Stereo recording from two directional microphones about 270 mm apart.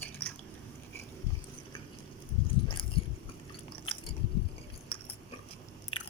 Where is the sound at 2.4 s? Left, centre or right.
Centre.